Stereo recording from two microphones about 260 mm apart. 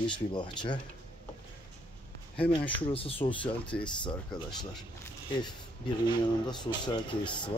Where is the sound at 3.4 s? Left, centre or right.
Centre.